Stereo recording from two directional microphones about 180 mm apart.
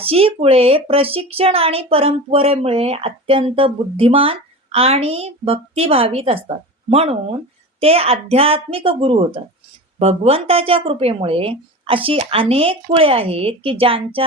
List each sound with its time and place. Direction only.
0.0 s speech: 30° right (ahead or behind)